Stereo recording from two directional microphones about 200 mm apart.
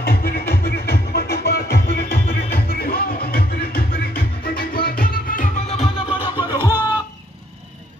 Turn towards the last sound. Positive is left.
turn(degrees=-10)  # may be behind; listen again after turning